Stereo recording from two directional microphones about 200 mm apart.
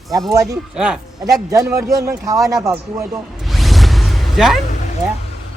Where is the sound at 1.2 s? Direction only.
15° right (ahead or behind).